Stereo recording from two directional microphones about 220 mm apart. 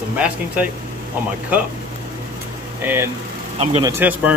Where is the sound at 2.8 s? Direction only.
10° right (ahead or behind).